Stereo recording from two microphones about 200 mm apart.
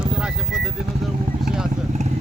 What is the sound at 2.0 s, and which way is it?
Speech, 35° right (ahead or behind).